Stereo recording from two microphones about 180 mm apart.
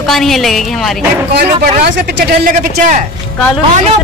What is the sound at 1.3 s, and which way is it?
Speech, 70° right (ahead or behind).